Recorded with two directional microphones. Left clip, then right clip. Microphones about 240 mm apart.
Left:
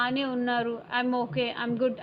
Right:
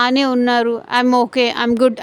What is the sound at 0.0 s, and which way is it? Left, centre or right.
A woman's voice, right.